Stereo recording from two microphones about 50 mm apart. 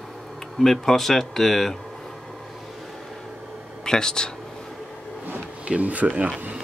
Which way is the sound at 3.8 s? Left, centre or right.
Centre.